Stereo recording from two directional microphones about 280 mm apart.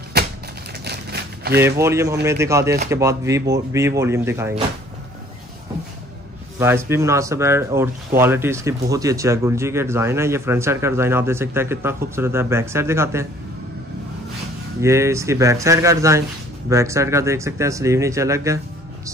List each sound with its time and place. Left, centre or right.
0.2 s typewriter: right
0.8 s a sound: right
1.6 s speech: centre
6.6 s speech: centre
14.8 s speech: centre